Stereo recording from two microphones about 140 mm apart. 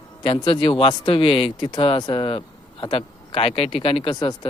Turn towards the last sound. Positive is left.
turn(degrees=30)  # may be behind; listen again after turning